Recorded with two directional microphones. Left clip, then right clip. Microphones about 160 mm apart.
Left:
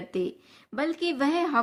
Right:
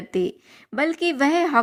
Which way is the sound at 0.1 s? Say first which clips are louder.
Right 7 dB; 45° right (ahead or behind).